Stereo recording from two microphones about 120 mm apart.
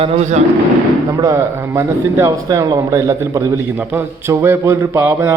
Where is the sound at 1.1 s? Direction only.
30° right (ahead or behind).